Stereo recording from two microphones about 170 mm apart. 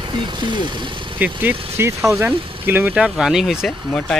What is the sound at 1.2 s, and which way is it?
Speech, 10° right (ahead or behind).